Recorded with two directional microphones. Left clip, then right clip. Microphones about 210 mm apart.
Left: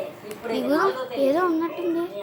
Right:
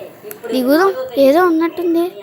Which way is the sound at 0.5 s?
30° right (ahead or behind).